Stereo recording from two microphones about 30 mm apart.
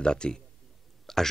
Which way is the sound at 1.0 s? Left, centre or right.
Centre.